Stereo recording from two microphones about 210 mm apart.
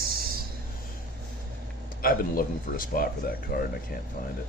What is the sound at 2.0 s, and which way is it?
Speech, 45° left (ahead or behind).